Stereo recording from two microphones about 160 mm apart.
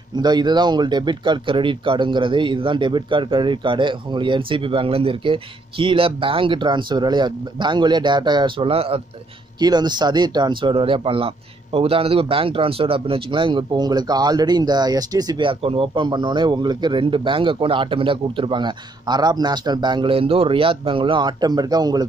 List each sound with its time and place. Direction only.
0.1 s speech: 25° right (ahead or behind)